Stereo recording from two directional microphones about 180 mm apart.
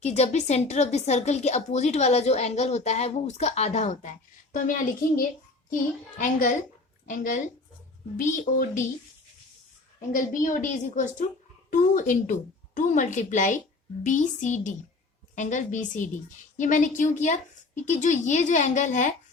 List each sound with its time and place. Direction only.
0.0 s a woman's voice: 40° left (ahead or behind)
10.1 s a woman's voice: 45° left (ahead or behind)